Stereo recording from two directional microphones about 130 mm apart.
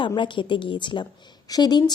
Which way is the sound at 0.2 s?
35° left (ahead or behind).